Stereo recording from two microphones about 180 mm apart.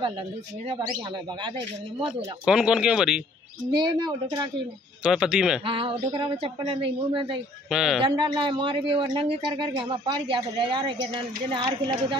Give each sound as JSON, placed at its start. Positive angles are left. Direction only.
{"t": 2.4, "sound": "speech", "side_deg": -5}
{"t": 3.7, "sound": "speech", "side_deg": -25}
{"t": 5.0, "sound": "speech", "side_deg": -5}
{"t": 5.7, "sound": "speech", "side_deg": -30}
{"t": 7.7, "sound": "speech", "side_deg": -5}
{"t": 8.0, "sound": "speech", "side_deg": -25}